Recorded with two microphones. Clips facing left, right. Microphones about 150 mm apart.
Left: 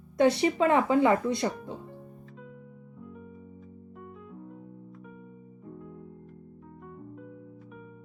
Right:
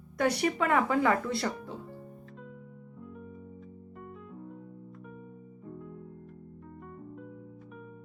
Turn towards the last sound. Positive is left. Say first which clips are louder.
# left 1 dB
turn(degrees=0)  # may be behind; listen again after turning